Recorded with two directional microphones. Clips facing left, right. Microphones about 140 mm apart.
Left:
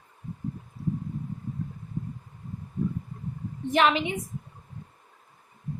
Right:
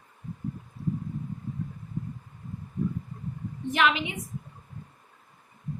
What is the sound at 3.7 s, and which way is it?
Speech, 35° left (ahead or behind).